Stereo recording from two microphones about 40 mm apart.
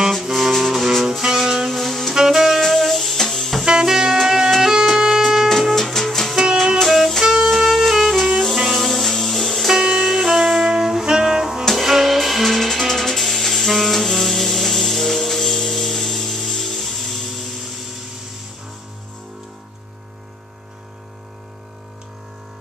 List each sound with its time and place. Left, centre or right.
0.1 s music: centre
2.1 s saxophone: centre
2.6 s music: centre
3.6 s music: centre
5.5 s music: centre
6.4 s music: centre
6.8 s music: centre
9.7 s music: centre